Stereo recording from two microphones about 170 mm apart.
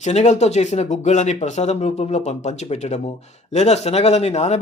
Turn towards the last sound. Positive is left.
turn(degrees=40)  # may be behind; listen again after turning